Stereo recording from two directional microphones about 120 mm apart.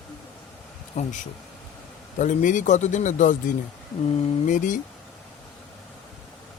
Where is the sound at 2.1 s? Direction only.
90° left.